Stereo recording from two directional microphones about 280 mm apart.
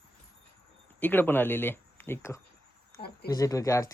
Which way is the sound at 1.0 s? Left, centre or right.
Centre.